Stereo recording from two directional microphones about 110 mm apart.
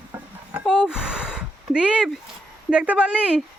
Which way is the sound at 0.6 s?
5° right (ahead or behind).